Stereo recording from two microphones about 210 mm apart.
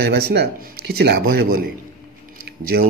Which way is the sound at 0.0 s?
50° right (ahead or behind).